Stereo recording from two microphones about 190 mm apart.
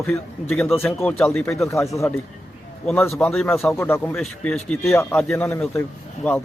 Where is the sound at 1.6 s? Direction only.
15° left (ahead or behind).